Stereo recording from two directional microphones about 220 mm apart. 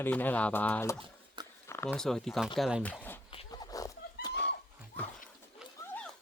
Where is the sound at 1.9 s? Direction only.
Centre (ahead or behind).